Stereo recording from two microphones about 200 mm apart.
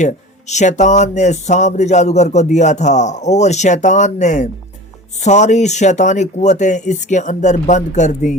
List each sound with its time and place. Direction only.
0.0 s speech: 35° left (ahead or behind)